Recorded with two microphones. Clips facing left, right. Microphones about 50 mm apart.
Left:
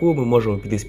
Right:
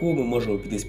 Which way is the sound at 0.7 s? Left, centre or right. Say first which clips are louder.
Left 5 dB; left.